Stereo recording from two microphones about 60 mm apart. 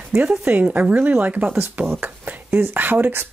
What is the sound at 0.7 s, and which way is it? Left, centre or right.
Speech, right.